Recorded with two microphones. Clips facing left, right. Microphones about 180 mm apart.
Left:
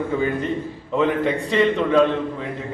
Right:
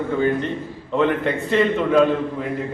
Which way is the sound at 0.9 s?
Centre (ahead or behind).